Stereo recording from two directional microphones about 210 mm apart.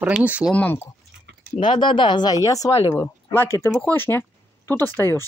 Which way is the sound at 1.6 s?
25° left (ahead or behind).